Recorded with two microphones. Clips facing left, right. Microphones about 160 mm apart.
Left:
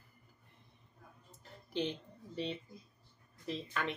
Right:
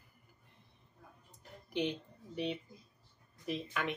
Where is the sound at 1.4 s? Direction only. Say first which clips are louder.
Right 1 dB; 15° right (ahead or behind).